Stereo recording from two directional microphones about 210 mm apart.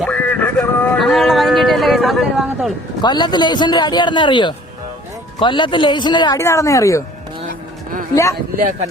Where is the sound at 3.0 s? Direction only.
20° left (ahead or behind).